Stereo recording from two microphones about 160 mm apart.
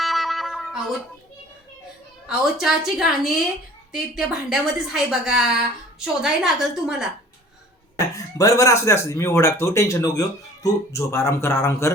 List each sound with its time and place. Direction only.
0.0 s music: centre (ahead or behind)
2.2 s a woman's voice: 5° right (ahead or behind)
7.9 s speech: 20° left (ahead or behind)